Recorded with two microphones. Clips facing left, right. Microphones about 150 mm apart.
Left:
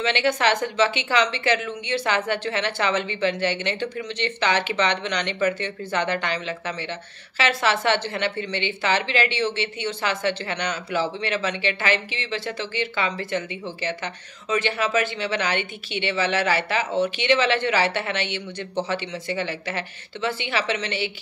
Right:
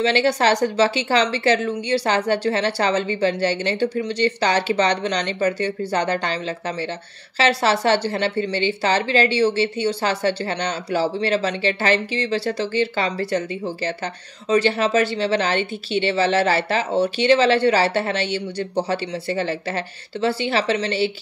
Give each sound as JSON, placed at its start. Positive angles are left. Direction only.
{"t": 0.0, "sound": "a woman's voice", "side_deg": -35}